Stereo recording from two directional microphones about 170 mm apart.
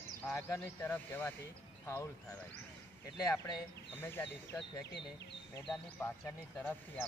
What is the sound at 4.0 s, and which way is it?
Speech, 15° left (ahead or behind).